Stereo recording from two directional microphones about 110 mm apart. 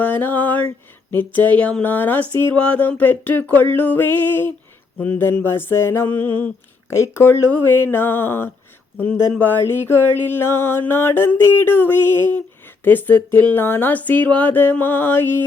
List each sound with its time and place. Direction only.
0.0 s a sound: 15° left (ahead or behind)
1.1 s speech: 15° left (ahead or behind)
4.9 s mantra: 15° left (ahead or behind)
9.0 s speech: 20° left (ahead or behind)
9.6 s mantra: 20° left (ahead or behind)
12.8 s speech: 15° left (ahead or behind)